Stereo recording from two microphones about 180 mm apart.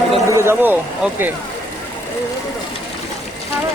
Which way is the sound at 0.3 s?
15° right (ahead or behind).